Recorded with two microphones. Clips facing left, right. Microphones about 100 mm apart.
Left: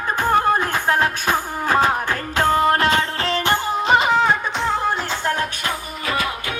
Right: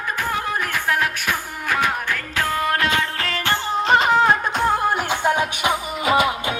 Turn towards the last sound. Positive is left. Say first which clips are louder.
# right 5 dB
turn(degrees=-20)  # may be behind; listen again after turning